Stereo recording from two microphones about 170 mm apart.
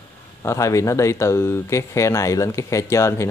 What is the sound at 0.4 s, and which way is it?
Speech, 20° left (ahead or behind).